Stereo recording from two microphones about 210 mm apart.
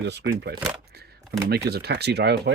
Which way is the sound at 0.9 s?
50° right (ahead or behind).